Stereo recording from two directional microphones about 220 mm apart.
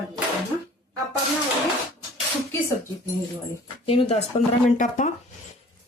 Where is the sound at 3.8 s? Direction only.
25° left (ahead or behind).